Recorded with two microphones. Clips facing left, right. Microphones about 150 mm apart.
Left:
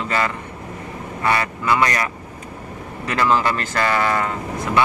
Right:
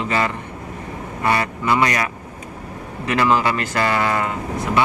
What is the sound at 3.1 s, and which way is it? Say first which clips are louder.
Speech: right 1 dB; 15° right (ahead or behind).